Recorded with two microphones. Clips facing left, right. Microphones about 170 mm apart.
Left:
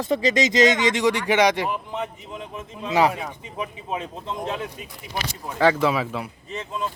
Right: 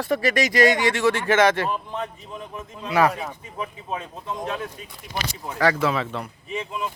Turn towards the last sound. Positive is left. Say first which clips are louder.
# even
turn(degrees=-10)  # may be behind; listen again after turning